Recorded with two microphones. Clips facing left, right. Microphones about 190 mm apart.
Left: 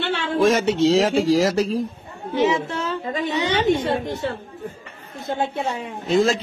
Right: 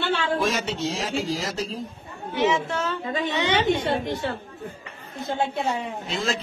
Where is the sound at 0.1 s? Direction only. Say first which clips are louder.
Left 7 dB; 55° left (ahead or behind); by 1.8 s 85° left.